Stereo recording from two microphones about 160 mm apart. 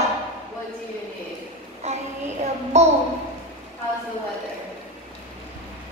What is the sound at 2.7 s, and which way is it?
Speech, 45° right (ahead or behind).